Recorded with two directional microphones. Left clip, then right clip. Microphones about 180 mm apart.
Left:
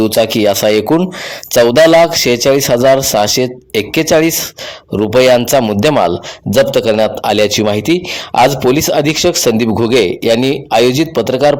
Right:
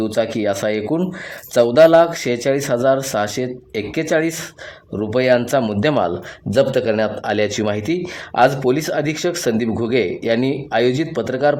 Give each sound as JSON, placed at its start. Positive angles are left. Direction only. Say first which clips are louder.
{"t": 0.0, "sound": "speech", "louder": "left 8 dB", "side_deg": 25}